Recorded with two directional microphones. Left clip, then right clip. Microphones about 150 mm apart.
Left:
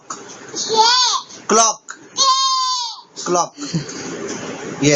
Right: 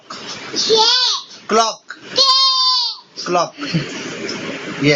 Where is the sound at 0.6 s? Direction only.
20° left (ahead or behind).